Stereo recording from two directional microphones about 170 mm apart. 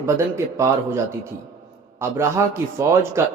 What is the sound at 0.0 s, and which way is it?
A man's voice, 15° right (ahead or behind).